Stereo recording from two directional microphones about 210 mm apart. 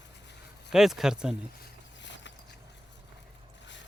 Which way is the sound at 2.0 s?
60° left (ahead or behind).